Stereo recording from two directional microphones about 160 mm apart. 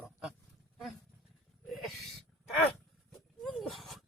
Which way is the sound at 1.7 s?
Centre (ahead or behind).